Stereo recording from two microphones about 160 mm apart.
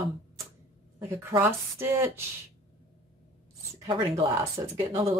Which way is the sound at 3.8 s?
30° right (ahead or behind).